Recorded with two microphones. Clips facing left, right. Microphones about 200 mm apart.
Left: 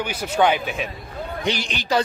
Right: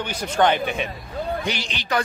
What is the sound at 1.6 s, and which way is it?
Speech, 50° left (ahead or behind).